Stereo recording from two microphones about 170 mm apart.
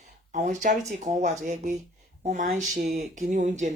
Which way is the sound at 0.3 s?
45° right (ahead or behind).